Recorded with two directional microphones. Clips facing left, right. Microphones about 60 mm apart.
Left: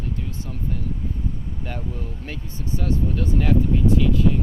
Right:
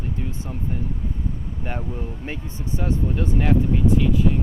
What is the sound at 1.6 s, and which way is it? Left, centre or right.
Speech, right.